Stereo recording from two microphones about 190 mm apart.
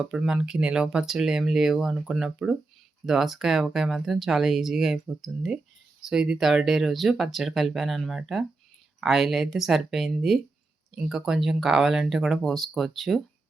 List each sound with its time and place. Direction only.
0.0 s speech: 5° right (ahead or behind)